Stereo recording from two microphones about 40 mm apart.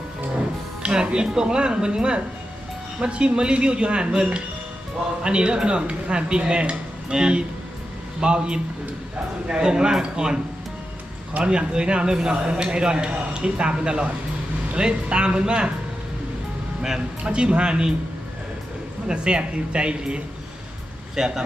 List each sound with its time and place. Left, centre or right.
0.8 s speech: right
11.3 s speech: right
17.2 s speech: right
19.0 s speech: right
21.2 s speech: centre